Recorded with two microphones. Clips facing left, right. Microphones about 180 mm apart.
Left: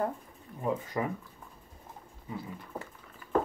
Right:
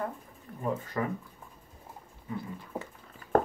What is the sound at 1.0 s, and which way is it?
Speech, 15° left (ahead or behind).